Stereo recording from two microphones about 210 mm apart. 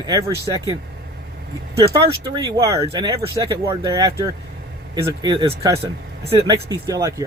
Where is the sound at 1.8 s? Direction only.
25° right (ahead or behind).